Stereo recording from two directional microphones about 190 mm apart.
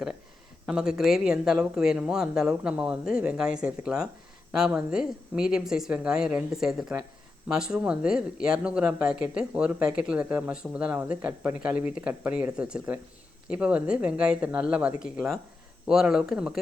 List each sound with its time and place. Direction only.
0.6 s speech: 5° right (ahead or behind)